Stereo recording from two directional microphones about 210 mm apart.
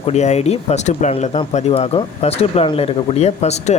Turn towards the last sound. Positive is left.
turn(degrees=30)  # may be behind; listen again after turning